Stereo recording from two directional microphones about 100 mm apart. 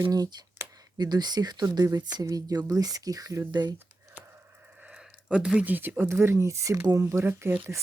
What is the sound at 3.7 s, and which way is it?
Computer keyboard, 20° right (ahead or behind).